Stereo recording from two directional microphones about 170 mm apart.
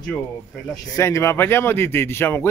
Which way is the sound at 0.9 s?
15° left (ahead or behind).